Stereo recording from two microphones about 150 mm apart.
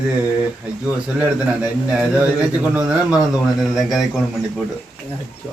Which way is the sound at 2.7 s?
5° right (ahead or behind).